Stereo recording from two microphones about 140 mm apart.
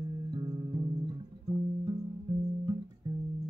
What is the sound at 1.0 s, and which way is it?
Music, 30° right (ahead or behind).